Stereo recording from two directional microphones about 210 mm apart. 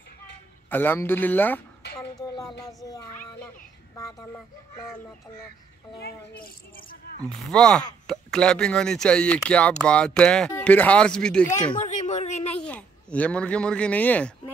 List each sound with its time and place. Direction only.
0.7 s a man's voice: 10° left (ahead or behind)
2.8 s a man's voice: 15° left (ahead or behind)
7.2 s speech: 5° left (ahead or behind)
11.8 s a sound: 35° left (ahead or behind)
12.5 s a child's voice: 5° left (ahead or behind)